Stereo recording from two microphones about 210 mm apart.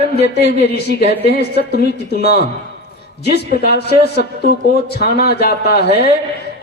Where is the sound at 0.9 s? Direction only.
50° left (ahead or behind).